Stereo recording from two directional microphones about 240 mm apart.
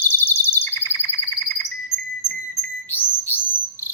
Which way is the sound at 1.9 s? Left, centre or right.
Left.